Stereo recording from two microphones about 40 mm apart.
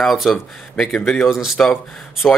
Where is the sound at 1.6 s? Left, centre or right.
Left.